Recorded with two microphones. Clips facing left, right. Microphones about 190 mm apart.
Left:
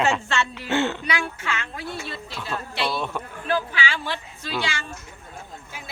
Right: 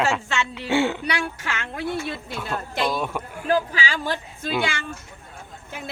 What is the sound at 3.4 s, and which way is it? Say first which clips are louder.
Speech: right 3 dB; 40° right (ahead or behind).